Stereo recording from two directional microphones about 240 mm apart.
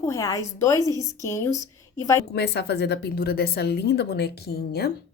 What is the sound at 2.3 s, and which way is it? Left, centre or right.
Speech, left.